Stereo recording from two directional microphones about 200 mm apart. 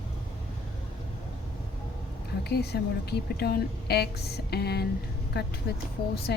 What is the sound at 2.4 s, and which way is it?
Speech, 55° left (ahead or behind).